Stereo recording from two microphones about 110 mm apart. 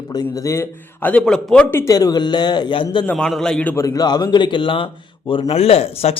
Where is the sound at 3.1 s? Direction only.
5° left (ahead or behind).